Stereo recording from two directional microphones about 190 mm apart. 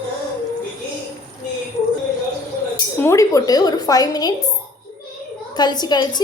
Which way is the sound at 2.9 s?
15° left (ahead or behind).